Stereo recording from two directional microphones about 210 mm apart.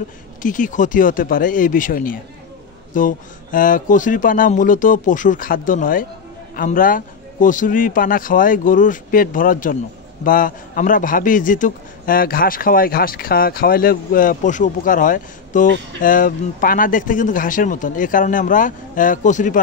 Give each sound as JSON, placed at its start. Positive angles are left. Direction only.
{"t": 0.4, "sound": "a man's voice", "side_deg": 40}